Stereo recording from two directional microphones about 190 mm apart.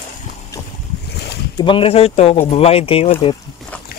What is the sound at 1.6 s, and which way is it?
Speech, 30° left (ahead or behind).